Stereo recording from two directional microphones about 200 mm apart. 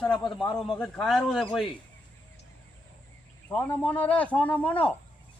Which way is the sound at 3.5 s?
5° left (ahead or behind).